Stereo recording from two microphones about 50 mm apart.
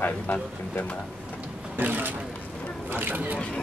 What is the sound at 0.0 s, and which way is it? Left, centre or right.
Speech, left.